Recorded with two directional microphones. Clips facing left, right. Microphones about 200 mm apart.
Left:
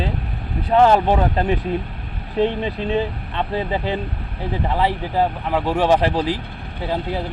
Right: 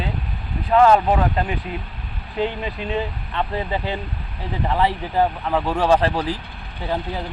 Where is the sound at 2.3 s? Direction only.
25° left (ahead or behind).